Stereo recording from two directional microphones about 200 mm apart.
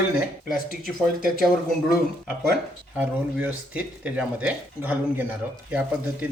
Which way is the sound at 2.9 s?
5° right (ahead or behind).